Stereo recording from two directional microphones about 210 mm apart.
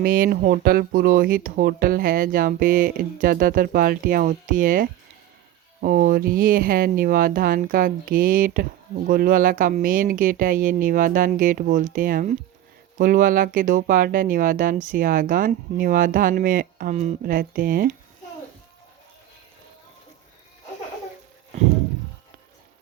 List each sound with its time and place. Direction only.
0.0 s speech: 45° right (ahead or behind)